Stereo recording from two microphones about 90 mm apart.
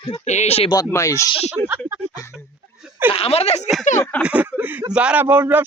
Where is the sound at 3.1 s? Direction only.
90° left.